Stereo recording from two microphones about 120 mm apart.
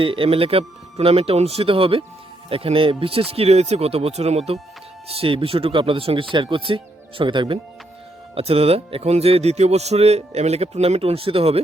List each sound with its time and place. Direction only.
0.0 s a man's voice: 50° right (ahead or behind)
8.4 s a man's voice: 55° right (ahead or behind)